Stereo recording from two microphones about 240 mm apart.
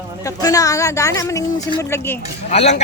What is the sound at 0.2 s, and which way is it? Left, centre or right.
Speech, centre.